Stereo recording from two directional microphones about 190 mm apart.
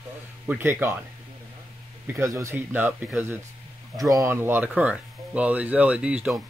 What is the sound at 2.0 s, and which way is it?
Speech, 15° right (ahead or behind).